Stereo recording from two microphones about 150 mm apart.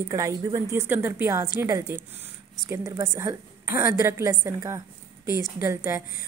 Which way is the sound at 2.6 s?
20° right (ahead or behind).